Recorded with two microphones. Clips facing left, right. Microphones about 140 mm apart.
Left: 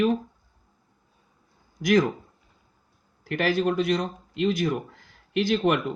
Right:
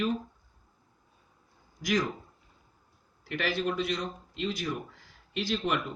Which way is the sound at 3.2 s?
45° left (ahead or behind).